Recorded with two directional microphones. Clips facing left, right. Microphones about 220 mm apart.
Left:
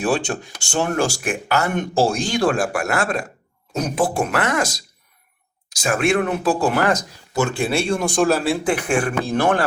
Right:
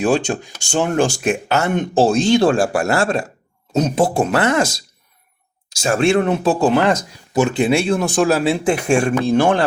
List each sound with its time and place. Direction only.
0.0 s speech: 20° right (ahead or behind)
5.8 s speech: 30° right (ahead or behind)
7.8 s speech: 5° right (ahead or behind)
8.4 s speech: 25° right (ahead or behind)